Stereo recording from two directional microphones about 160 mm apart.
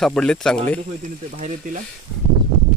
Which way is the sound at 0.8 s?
55° right (ahead or behind).